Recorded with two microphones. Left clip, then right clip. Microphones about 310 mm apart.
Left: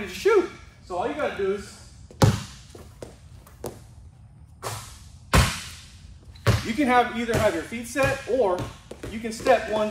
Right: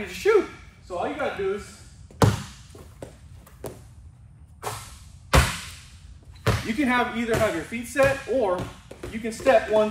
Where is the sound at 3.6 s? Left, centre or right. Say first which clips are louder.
Left 2 dB; centre.